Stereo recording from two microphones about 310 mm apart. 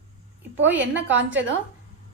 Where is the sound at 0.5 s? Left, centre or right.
Centre.